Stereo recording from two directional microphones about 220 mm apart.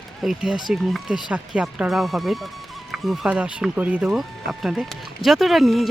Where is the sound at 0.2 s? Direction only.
Centre (ahead or behind).